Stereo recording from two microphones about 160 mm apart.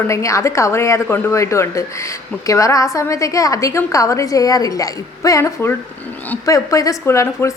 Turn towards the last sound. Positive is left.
turn(degrees=20)  # may be behind; listen again after turning